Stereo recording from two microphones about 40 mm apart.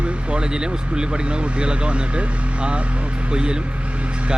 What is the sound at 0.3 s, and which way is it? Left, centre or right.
Speech, right.